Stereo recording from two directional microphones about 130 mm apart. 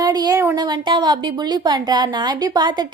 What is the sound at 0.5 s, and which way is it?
A woman's voice, 35° right (ahead or behind).